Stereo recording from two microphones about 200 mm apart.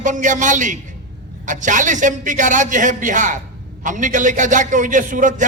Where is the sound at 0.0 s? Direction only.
40° right (ahead or behind).